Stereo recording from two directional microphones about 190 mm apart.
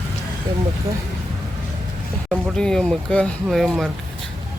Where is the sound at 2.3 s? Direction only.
5° left (ahead or behind).